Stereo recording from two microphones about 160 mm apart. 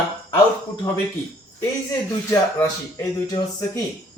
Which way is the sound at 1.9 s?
15° left (ahead or behind).